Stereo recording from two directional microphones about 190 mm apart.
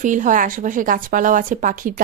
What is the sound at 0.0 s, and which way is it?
A woman's voice, 40° right (ahead or behind).